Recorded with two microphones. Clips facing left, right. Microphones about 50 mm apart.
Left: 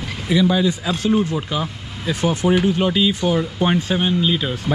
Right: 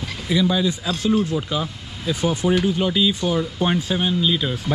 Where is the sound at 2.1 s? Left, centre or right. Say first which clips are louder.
Left 2 dB; left.